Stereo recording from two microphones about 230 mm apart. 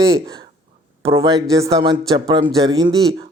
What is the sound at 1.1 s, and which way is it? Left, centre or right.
Speech, centre.